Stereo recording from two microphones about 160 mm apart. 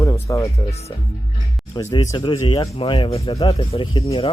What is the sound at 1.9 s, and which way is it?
Speech, 25° left (ahead or behind).